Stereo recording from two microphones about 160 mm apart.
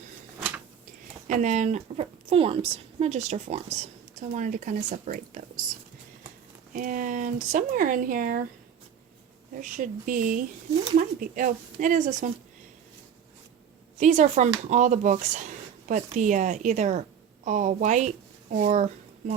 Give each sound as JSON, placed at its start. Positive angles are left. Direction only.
{"t": 1.3, "sound": "a woman's voice", "side_deg": -50}
{"t": 6.7, "sound": "speech", "side_deg": -55}
{"t": 9.6, "sound": "a woman's voice", "side_deg": -55}
{"t": 14.0, "sound": "a woman's voice", "side_deg": -50}